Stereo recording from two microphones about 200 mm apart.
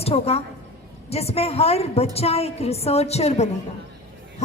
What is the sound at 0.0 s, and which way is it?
A woman's voice, 30° left (ahead or behind).